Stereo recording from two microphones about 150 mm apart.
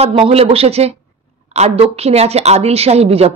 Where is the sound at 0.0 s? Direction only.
40° right (ahead or behind).